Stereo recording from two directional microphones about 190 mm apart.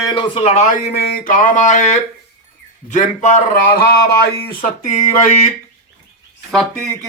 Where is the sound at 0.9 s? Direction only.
55° left (ahead or behind).